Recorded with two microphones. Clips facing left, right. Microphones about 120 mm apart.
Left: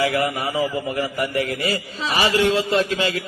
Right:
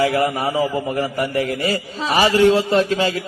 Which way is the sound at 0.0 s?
30° right (ahead or behind).